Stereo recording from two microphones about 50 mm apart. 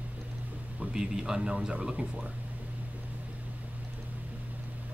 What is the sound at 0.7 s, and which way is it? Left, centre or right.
Speech, centre.